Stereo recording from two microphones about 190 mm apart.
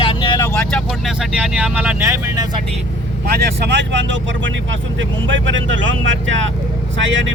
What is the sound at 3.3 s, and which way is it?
Speech, 65° right (ahead or behind).